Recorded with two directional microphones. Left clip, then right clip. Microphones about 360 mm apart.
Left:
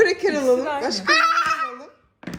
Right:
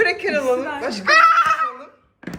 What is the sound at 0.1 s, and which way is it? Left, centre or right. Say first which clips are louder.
Speech: even; centre.